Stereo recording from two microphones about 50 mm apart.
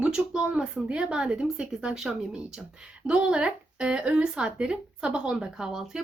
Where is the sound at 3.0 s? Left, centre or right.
Centre.